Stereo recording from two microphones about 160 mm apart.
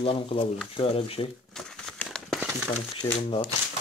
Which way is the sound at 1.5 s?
5° left (ahead or behind).